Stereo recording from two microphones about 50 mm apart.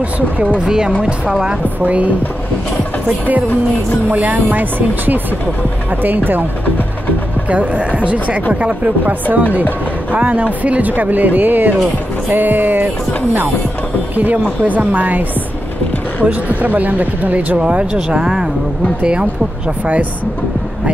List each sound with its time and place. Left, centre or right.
0.7 s speech: centre
1.8 s speech: right
4.1 s speech: right
7.4 s speech: right
14.1 s speech: right
17.6 s speech: right